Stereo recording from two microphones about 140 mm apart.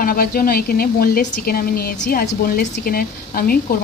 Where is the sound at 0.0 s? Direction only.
90° left.